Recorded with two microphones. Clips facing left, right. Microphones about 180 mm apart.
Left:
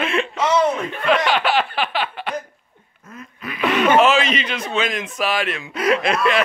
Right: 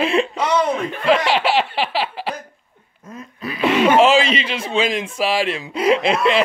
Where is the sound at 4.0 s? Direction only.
30° right (ahead or behind).